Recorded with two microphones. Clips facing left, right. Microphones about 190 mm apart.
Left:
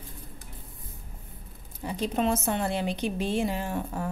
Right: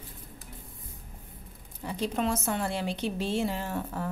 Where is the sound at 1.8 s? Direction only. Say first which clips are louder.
Left 2 dB; 20° left (ahead or behind).